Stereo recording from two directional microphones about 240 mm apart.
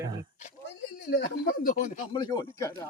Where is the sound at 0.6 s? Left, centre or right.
Left.